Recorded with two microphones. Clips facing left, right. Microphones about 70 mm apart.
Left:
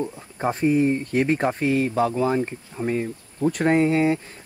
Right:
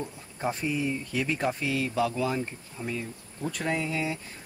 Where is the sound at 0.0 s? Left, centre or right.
Left.